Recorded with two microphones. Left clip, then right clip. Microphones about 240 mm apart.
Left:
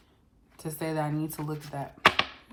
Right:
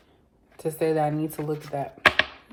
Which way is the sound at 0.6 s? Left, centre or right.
Centre.